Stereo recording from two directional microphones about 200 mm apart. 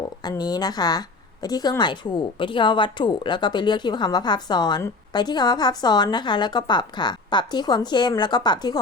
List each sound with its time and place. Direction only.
0.2 s a woman's voice: 20° left (ahead or behind)